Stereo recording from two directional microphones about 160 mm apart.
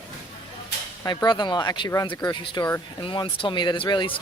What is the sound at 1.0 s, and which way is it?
Speech, 25° left (ahead or behind).